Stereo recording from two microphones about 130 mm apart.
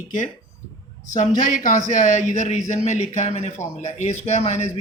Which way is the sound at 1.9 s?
70° left (ahead or behind).